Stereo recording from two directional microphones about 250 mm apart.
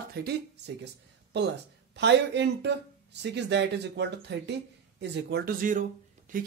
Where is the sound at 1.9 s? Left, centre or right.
Right.